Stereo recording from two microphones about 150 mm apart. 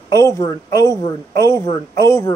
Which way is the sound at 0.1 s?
20° left (ahead or behind).